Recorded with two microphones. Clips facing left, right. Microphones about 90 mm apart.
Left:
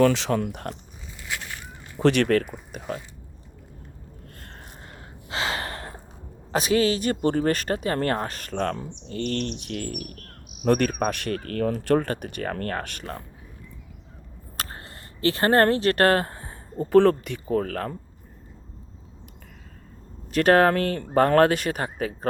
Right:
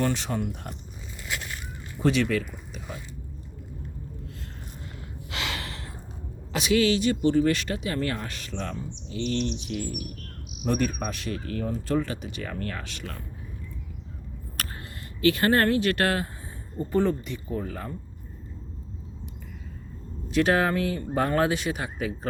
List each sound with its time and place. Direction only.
0.0 s speech: 90° left
2.0 s speech: 65° left (ahead or behind)
5.3 s gasp: 35° left (ahead or behind)
6.5 s speech: 40° left (ahead or behind)
14.5 s a sound: 25° left (ahead or behind)
15.2 s speech: 35° left (ahead or behind); by 16.3 s 50° left (ahead or behind)
16.7 s speech: 75° left (ahead or behind)
20.3 s speech: 55° left (ahead or behind)